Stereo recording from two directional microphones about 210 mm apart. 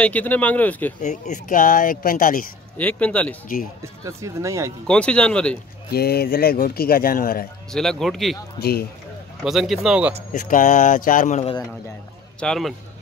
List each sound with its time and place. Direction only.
0.0 s speech: 5° left (ahead or behind)
1.0 s speech: 35° left (ahead or behind)
2.8 s speech: 5° left (ahead or behind)
3.8 s speech: 15° right (ahead or behind)
4.8 s speech: 5° left (ahead or behind)
5.9 s speech: 50° left (ahead or behind)
7.7 s speech: centre (ahead or behind)
8.5 s speech: 50° left (ahead or behind)
9.4 s speech: centre (ahead or behind)
10.3 s speech: 35° left (ahead or behind)
12.4 s speech: centre (ahead or behind)